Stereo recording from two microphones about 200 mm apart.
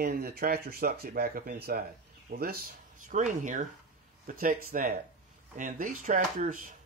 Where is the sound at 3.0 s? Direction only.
40° right (ahead or behind).